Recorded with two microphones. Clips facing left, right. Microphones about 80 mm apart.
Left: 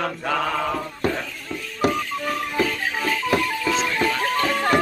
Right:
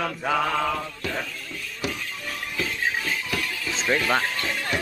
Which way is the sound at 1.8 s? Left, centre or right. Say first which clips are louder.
Left 10 dB; left.